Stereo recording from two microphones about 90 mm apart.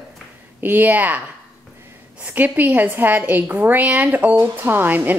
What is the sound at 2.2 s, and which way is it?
A woman's voice, 15° right (ahead or behind).